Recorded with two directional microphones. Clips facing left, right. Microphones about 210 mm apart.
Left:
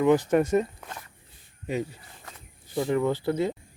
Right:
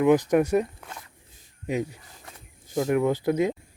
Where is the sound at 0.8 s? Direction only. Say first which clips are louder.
Left 1 dB; centre (ahead or behind).